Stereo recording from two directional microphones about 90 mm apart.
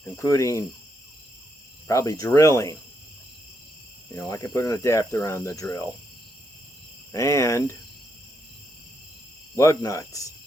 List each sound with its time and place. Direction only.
0.0 s speech: 35° left (ahead or behind)
1.9 s speech: 35° left (ahead or behind)
4.1 s speech: 35° left (ahead or behind)
7.1 s speech: 35° left (ahead or behind)
9.6 s speech: 35° left (ahead or behind)